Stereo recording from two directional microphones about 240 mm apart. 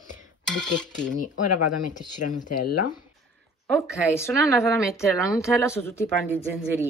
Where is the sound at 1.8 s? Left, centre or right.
Left.